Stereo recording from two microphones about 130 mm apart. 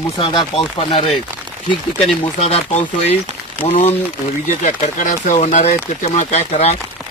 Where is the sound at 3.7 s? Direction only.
55° left (ahead or behind).